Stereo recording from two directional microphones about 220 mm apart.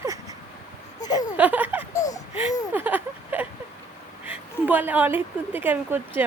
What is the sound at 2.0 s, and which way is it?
Babbling, 15° left (ahead or behind).